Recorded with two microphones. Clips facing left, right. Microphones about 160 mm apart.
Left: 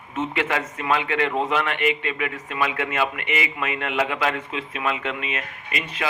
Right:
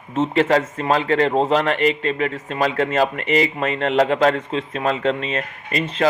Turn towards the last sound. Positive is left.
turn(degrees=-35)  # may be behind; listen again after turning